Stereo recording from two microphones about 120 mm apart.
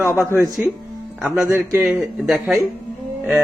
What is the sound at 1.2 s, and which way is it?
Speech, 20° right (ahead or behind).